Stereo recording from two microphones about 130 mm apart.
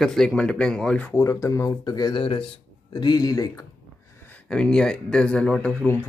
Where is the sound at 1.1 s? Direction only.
25° left (ahead or behind).